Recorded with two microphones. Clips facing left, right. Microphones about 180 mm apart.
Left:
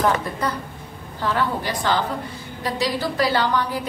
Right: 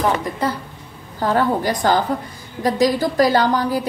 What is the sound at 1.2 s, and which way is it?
A woman's voice, 45° right (ahead or behind).